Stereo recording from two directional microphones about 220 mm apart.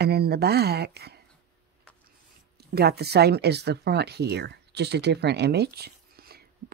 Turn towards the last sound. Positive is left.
turn(degrees=-45)  # may be behind; listen again after turning